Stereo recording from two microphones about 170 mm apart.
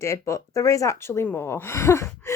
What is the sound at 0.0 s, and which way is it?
Speech, 15° left (ahead or behind).